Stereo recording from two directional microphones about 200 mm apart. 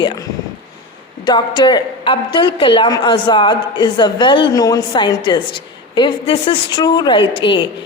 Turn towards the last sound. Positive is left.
turn(degrees=25)  # may be behind; listen again after turning